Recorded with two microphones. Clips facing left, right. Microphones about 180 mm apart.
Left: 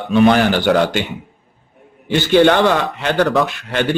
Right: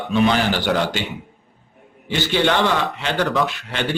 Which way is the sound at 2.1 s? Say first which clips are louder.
Left 7 dB; 50° left (ahead or behind).